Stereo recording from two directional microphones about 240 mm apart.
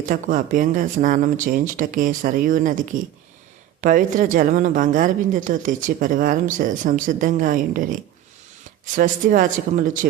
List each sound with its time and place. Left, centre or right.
0.0 s a woman's voice: right
9.0 s a woman's voice: right